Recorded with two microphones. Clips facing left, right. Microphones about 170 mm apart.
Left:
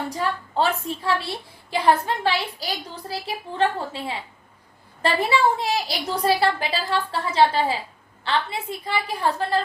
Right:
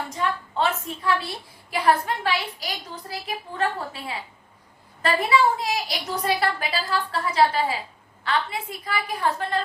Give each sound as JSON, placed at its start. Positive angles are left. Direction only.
{"t": 0.1, "sound": "a woman's voice", "side_deg": 35}